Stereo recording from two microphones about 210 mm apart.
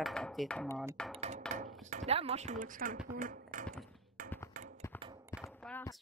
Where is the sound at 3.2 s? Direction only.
40° right (ahead or behind).